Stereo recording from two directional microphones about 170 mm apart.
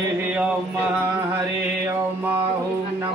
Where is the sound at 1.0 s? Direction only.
10° right (ahead or behind).